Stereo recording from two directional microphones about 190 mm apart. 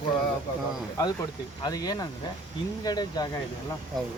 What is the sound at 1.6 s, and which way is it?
Speech, 20° left (ahead or behind).